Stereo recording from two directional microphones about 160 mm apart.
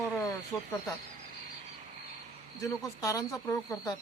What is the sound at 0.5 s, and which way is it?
Speech, 10° left (ahead or behind).